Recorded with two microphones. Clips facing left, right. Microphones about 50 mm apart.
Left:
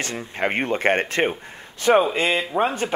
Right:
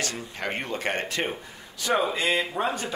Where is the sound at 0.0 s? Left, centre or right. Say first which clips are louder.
Left 6 dB; left.